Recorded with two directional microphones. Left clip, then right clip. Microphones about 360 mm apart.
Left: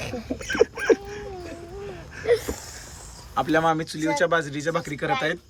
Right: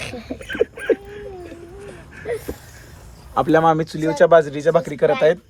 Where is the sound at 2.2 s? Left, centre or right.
Left.